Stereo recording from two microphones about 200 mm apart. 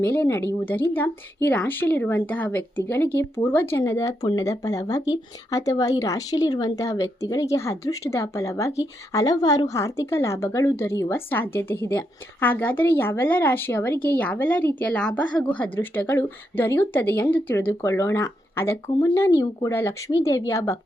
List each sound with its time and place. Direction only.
0.0 s speech: 10° left (ahead or behind)